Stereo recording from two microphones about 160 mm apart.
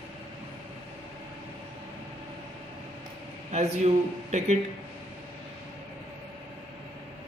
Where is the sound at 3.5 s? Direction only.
45° right (ahead or behind).